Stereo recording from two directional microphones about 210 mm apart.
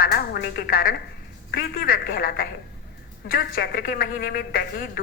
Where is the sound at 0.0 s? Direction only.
50° left (ahead or behind).